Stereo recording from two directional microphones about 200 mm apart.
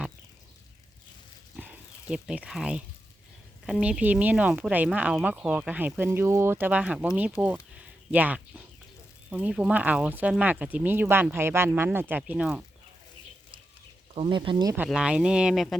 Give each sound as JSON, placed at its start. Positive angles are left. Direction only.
{"t": 1.5, "sound": "a sound", "side_deg": -5}
{"t": 3.7, "sound": "speech", "side_deg": -5}
{"t": 14.2, "sound": "speech", "side_deg": -25}
{"t": 14.8, "sound": "speech", "side_deg": -5}